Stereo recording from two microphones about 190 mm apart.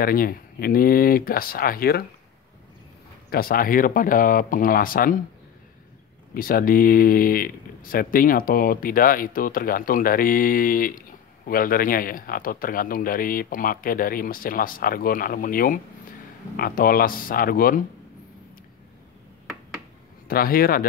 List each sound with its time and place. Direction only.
0.0 s speech: 50° left (ahead or behind)
3.3 s speech: 50° left (ahead or behind)
6.3 s speech: 50° left (ahead or behind)
20.2 s speech: 50° left (ahead or behind)